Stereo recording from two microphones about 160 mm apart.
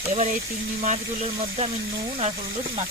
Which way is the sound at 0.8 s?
45° right (ahead or behind).